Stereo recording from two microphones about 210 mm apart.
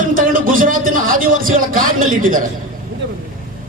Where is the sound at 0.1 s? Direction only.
40° right (ahead or behind).